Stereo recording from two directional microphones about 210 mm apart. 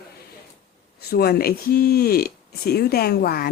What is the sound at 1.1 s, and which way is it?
Speech, 45° left (ahead or behind).